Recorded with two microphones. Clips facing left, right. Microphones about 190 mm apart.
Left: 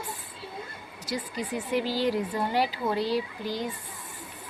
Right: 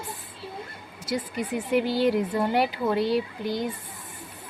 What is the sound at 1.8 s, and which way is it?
Speech, 60° right (ahead or behind).